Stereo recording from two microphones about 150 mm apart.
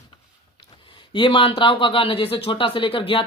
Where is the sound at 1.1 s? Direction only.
35° left (ahead or behind).